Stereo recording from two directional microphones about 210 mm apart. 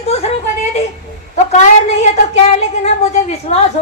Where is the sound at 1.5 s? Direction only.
35° left (ahead or behind).